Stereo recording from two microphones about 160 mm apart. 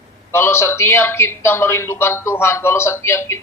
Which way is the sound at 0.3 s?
15° left (ahead or behind).